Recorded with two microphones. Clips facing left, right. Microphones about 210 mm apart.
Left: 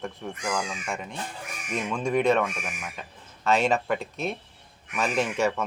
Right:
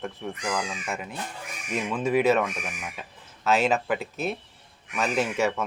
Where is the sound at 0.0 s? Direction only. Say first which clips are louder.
Right 1 dB; centre (ahead or behind).